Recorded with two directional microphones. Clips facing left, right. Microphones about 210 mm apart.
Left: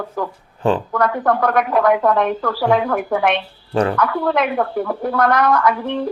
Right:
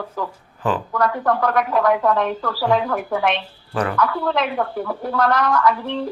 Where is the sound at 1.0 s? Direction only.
55° left (ahead or behind).